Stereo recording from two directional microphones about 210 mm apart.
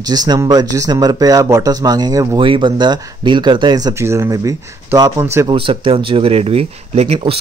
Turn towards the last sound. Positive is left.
turn(degrees=-30)  # may be behind; listen again after turning